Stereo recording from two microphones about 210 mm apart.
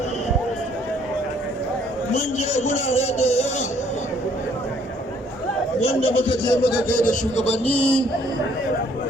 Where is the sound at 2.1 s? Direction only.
30° left (ahead or behind).